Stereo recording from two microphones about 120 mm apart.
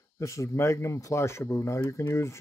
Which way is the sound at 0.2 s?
25° left (ahead or behind).